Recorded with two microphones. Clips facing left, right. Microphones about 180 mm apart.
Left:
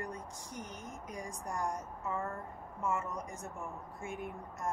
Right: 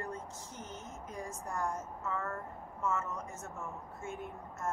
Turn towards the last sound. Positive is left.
turn(degrees=15)  # may be behind; listen again after turning